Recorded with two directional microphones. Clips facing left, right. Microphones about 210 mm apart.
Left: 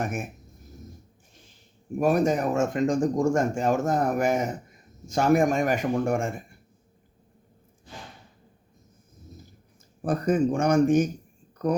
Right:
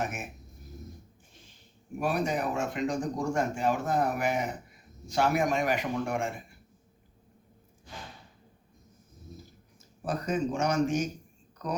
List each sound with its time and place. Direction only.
0.0 s speech: 50° left (ahead or behind)
2.0 s speech: 45° left (ahead or behind)
10.0 s speech: 50° left (ahead or behind)